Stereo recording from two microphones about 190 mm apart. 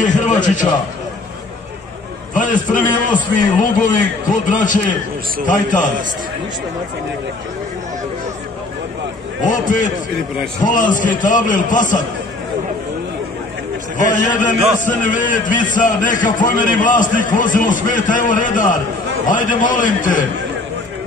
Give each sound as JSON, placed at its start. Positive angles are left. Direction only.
{"t": 0.0, "sound": "a man's voice", "side_deg": 40}
{"t": 2.3, "sound": "a man's voice", "side_deg": 45}
{"t": 9.4, "sound": "a man's voice", "side_deg": 40}
{"t": 14.2, "sound": "a man's voice", "side_deg": 40}